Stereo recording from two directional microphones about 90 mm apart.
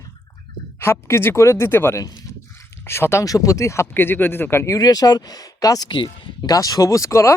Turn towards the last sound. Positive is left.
turn(degrees=35)  # may be behind; listen again after turning